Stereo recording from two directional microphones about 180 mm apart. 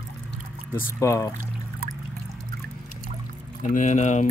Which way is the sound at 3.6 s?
45° left (ahead or behind).